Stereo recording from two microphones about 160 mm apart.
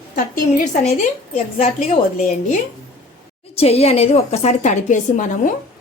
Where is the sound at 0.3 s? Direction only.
50° left (ahead or behind).